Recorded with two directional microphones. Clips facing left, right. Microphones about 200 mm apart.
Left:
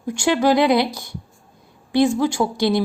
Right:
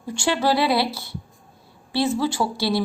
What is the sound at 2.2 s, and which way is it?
Speech, 15° left (ahead or behind).